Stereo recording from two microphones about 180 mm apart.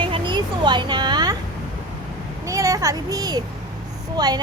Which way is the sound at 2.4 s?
20° right (ahead or behind).